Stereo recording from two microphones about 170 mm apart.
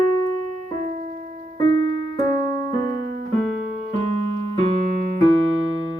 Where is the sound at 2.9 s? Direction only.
70° right (ahead or behind).